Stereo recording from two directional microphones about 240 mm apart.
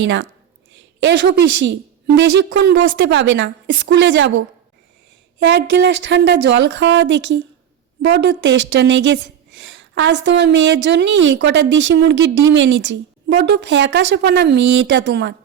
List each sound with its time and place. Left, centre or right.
0.0 s a woman's voice: right